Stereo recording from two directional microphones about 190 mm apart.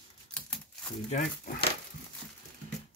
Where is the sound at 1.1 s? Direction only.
35° left (ahead or behind).